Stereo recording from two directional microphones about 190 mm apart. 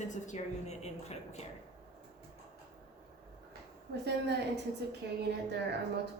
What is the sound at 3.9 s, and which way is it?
Speech, 60° right (ahead or behind).